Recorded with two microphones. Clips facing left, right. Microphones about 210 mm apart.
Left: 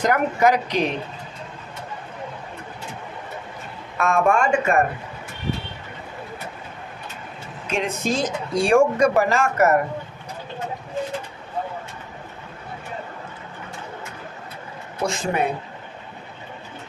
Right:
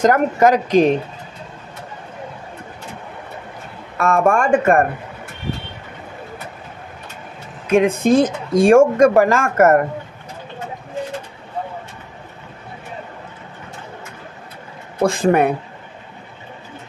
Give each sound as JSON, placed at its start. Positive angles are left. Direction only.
{"t": 0.0, "sound": "speech", "side_deg": -45}
{"t": 4.0, "sound": "speech", "side_deg": -45}
{"t": 7.6, "sound": "speech", "side_deg": -55}
{"t": 15.0, "sound": "speech", "side_deg": -55}